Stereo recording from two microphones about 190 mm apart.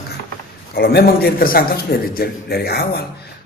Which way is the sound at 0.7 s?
55° left (ahead or behind).